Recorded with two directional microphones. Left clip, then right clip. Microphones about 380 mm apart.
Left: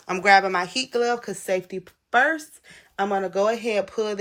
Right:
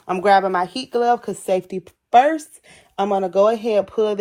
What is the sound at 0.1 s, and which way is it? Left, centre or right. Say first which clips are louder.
Speech: right 2 dB; centre.